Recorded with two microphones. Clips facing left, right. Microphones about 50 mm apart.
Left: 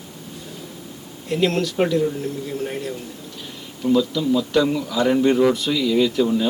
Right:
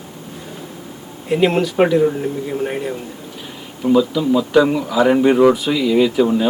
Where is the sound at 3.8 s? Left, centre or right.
Centre.